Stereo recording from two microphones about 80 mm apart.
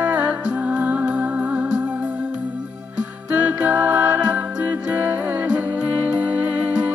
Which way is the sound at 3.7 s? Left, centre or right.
Right.